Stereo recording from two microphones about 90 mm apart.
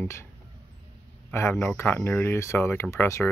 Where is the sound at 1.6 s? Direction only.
25° left (ahead or behind).